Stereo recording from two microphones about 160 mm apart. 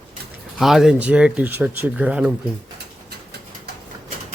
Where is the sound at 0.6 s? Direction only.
Centre (ahead or behind).